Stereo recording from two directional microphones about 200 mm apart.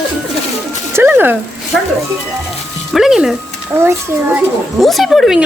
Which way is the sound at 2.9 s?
Centre (ahead or behind).